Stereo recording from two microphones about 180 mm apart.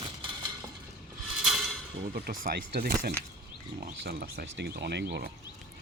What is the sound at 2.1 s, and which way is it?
Speech, 55° right (ahead or behind).